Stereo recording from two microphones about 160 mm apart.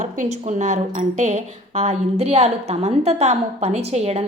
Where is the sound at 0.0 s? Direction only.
50° right (ahead or behind).